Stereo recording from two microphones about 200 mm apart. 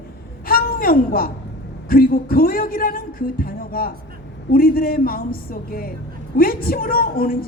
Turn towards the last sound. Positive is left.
turn(degrees=45)  # may be behind; listen again after turning